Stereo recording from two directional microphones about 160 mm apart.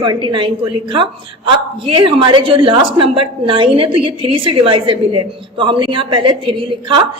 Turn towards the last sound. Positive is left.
turn(degrees=-30)  # may be behind; listen again after turning